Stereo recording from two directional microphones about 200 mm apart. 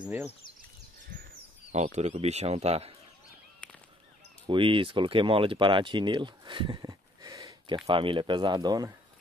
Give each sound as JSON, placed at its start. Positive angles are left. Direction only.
{"t": 1.7, "sound": "speech", "side_deg": -35}
{"t": 4.5, "sound": "speech", "side_deg": -25}